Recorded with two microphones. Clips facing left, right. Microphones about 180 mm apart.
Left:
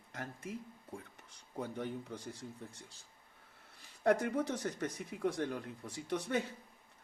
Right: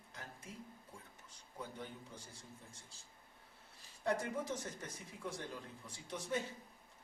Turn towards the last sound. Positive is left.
turn(degrees=65)  # may be behind; listen again after turning